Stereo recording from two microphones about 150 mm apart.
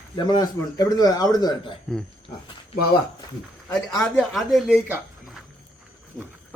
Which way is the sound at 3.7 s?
5° left (ahead or behind).